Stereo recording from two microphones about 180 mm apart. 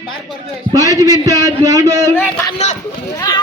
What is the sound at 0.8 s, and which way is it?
Speech, 20° right (ahead or behind).